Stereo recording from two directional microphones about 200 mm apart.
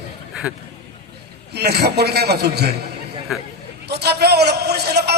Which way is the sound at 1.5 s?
55° right (ahead or behind).